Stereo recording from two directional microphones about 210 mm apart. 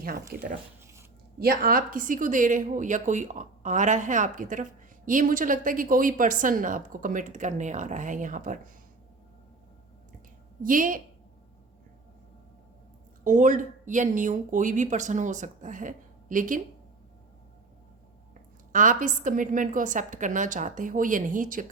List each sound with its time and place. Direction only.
0.3 s speech: 45° right (ahead or behind)
10.6 s speech: 40° right (ahead or behind)
13.2 s speech: 35° right (ahead or behind)
18.7 s speech: 40° right (ahead or behind)